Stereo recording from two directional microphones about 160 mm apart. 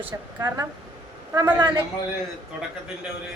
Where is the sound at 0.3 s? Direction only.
20° right (ahead or behind).